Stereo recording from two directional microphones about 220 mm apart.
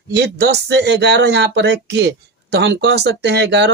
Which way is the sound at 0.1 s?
50° right (ahead or behind).